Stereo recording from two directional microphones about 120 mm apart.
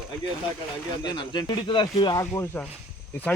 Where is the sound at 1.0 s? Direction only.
35° left (ahead or behind).